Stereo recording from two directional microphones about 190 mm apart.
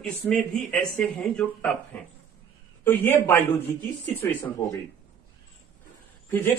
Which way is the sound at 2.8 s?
10° left (ahead or behind).